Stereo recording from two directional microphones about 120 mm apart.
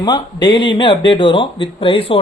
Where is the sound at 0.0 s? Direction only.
40° left (ahead or behind).